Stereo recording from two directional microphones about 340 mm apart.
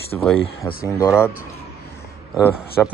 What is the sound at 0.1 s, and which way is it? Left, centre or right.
Speech, centre.